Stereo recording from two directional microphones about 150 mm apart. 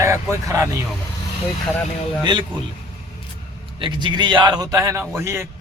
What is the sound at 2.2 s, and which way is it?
Speech, 30° right (ahead or behind).